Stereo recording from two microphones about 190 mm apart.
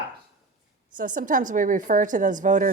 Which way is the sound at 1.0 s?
45° right (ahead or behind).